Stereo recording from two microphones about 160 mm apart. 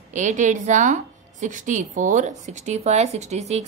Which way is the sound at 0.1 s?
50° right (ahead or behind).